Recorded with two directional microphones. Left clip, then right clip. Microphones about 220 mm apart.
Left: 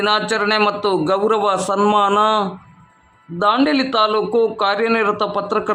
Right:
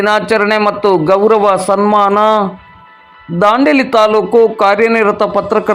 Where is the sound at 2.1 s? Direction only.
25° right (ahead or behind).